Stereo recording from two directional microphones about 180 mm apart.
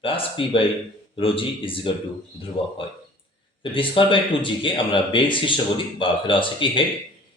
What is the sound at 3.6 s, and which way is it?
Speech, 30° left (ahead or behind).